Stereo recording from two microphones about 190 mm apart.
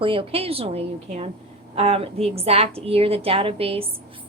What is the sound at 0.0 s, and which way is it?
A woman's voice, 30° right (ahead or behind).